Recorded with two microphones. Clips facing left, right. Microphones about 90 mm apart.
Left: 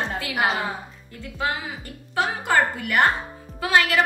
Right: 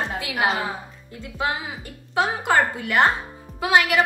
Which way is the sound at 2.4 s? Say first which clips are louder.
Right 1 dB; 20° right (ahead or behind).